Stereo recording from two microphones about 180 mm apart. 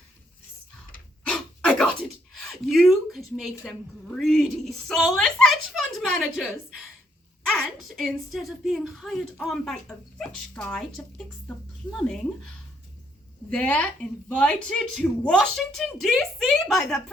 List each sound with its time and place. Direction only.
1.3 s a sound: 5° left (ahead or behind)
3.6 s a woman's voice: centre (ahead or behind)
13.5 s a woman's voice: 5° left (ahead or behind)